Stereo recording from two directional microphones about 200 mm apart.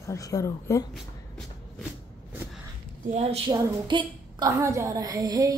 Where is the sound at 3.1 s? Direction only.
30° right (ahead or behind).